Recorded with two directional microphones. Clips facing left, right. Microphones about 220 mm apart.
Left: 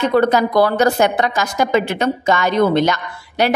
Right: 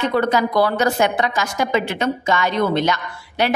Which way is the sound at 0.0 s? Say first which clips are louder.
Left 4 dB; 45° left (ahead or behind).